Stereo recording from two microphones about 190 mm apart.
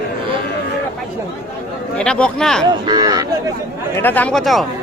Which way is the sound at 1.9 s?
5° left (ahead or behind).